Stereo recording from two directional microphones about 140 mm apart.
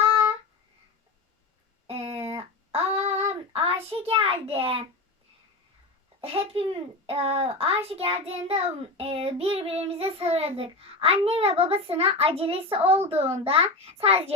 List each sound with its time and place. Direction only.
1.9 s child singing: 45° right (ahead or behind)
6.2 s a child's voice: 45° right (ahead or behind)